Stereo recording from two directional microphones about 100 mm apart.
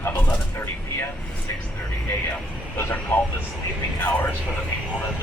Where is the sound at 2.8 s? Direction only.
20° left (ahead or behind).